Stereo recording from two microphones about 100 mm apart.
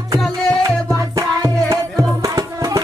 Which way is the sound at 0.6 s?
35° right (ahead or behind).